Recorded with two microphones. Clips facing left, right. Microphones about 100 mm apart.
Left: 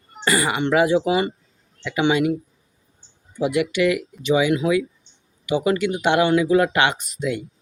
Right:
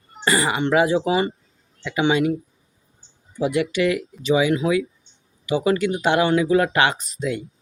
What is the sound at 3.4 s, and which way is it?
Speech, 35° right (ahead or behind).